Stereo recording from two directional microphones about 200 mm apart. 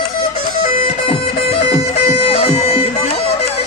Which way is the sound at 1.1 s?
30° left (ahead or behind).